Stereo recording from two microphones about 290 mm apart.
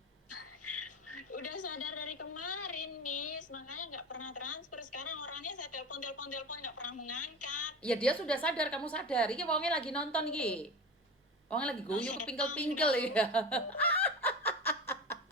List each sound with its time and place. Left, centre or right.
0.3 s a sound: left
7.8 s a woman's voice: centre
12.5 s snicker: centre